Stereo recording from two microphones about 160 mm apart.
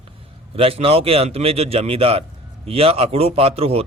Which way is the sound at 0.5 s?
35° right (ahead or behind).